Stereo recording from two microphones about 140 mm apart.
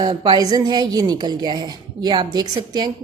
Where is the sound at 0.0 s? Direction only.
30° right (ahead or behind).